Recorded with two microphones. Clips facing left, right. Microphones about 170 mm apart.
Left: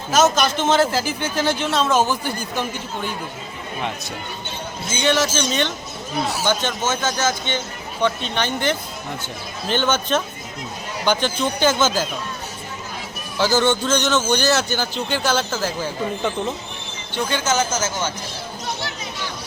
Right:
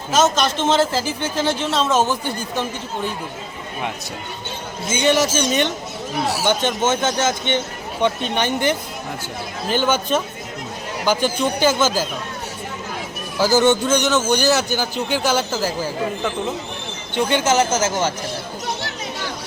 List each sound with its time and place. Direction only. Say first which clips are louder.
0.1 s speech: even; centre (ahead or behind)
0.9 s speech: even; 30° right (ahead or behind)
1.7 s speech: even; centre (ahead or behind)
4.9 s a man's voice: right 2 dB; 15° right (ahead or behind)
8.0 s a man's voice: right 2 dB; 15° right (ahead or behind)
13.4 s a man's voice: right 3 dB; 10° right (ahead or behind)
17.2 s speech: right 4 dB; 25° right (ahead or behind)